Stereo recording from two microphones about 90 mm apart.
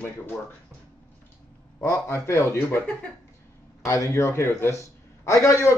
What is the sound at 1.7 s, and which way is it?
A man's voice, 30° left (ahead or behind).